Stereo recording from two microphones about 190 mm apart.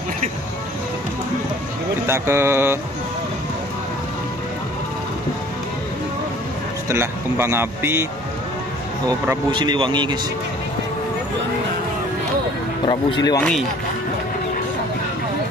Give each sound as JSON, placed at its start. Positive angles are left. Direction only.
{"t": 2.0, "sound": "speech", "side_deg": -15}
{"t": 6.9, "sound": "speech", "side_deg": -15}
{"t": 9.0, "sound": "speech", "side_deg": -25}
{"t": 12.8, "sound": "speech", "side_deg": 25}
{"t": 13.4, "sound": "speech", "side_deg": 5}